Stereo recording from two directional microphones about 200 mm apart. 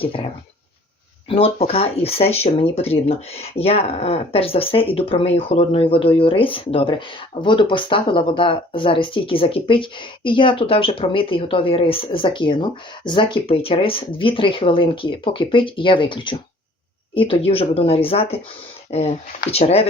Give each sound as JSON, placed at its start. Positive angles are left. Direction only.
{"t": 0.0, "sound": "speech", "side_deg": 25}
{"t": 1.3, "sound": "speech", "side_deg": 30}